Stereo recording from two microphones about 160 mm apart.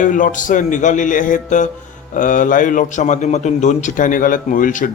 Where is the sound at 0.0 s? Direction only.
55° left (ahead or behind).